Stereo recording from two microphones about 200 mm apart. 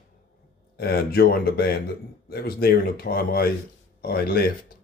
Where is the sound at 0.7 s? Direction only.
50° left (ahead or behind).